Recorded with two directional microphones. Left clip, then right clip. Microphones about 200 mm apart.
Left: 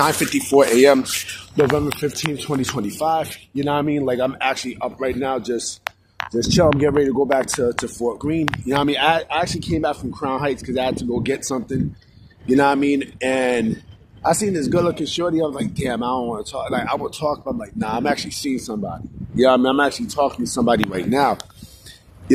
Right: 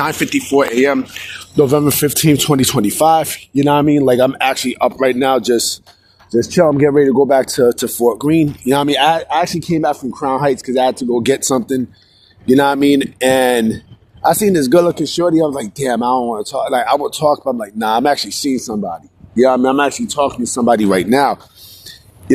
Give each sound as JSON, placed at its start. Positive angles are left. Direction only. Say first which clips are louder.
{"t": 0.0, "sound": "speech", "louder": "right 1 dB", "side_deg": 0}
{"t": 1.5, "sound": "speech", "louder": "right 5 dB", "side_deg": -40}
{"t": 2.0, "sound": "speech", "louder": "right 10 dB", "side_deg": -60}
{"t": 2.7, "sound": "speech", "louder": "right 9 dB", "side_deg": -45}
{"t": 6.4, "sound": "speech", "louder": "right 4 dB", "side_deg": -25}
{"t": 7.6, "sound": "speech", "louder": "right 8 dB", "side_deg": -50}
{"t": 19.9, "sound": "speech", "louder": "right 4 dB", "side_deg": -45}